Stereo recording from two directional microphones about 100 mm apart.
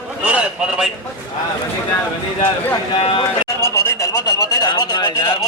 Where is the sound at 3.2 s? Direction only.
30° left (ahead or behind).